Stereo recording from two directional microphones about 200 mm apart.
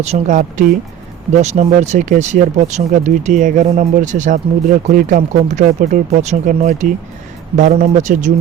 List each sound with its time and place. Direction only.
0.0 s speech: 35° right (ahead or behind)